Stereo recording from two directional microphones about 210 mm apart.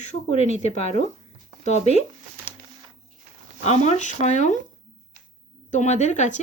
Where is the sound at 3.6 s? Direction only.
30° left (ahead or behind).